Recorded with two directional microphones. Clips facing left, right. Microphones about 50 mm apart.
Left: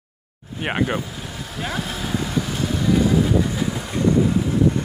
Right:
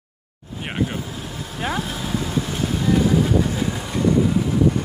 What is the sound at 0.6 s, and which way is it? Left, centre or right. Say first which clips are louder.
Speech: left 3 dB; left.